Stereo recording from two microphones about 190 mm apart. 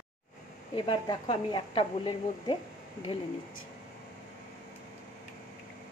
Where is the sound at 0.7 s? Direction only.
25° left (ahead or behind).